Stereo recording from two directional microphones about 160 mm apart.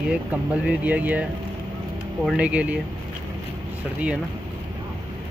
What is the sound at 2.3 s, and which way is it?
Speech, 10° right (ahead or behind).